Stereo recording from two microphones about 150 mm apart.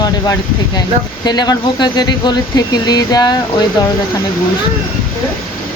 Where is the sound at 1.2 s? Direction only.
25° left (ahead or behind).